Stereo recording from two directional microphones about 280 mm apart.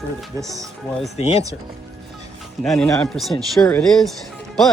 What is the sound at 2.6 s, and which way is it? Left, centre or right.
Speech, centre.